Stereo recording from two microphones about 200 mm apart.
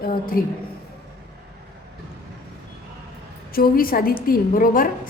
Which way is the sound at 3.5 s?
45° left (ahead or behind).